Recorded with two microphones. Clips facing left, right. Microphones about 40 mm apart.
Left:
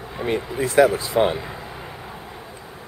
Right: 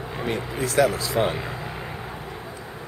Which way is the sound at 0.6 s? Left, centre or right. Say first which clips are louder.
Left 4 dB; centre.